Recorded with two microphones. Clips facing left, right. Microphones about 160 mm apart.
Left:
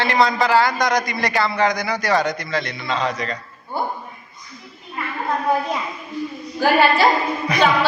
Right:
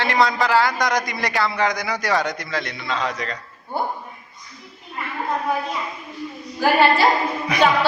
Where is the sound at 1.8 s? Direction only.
10° right (ahead or behind).